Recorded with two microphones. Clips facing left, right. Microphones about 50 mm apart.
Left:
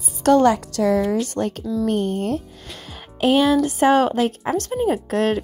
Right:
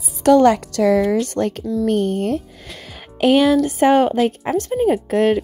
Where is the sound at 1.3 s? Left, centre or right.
Right.